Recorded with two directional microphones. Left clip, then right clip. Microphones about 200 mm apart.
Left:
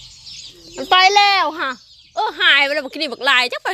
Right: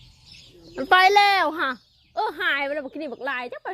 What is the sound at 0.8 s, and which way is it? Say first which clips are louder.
A child's voice: left 4 dB; 20° right (ahead or behind).